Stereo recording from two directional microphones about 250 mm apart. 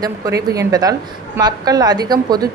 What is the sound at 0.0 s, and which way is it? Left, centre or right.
A woman's voice, centre.